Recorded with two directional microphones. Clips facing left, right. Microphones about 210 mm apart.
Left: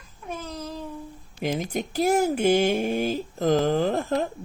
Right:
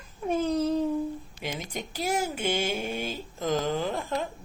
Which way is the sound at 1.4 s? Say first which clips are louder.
Left 10 dB; 50° left (ahead or behind).